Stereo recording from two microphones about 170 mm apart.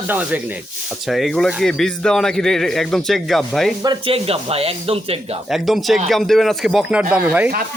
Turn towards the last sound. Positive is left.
turn(degrees=-10)  # may be behind; listen again after turning